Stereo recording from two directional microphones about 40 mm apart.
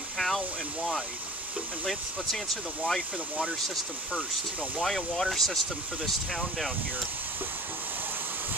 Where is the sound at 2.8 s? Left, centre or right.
Centre.